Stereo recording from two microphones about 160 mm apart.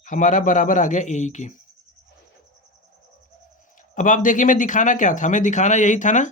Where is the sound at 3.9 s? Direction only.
55° left (ahead or behind).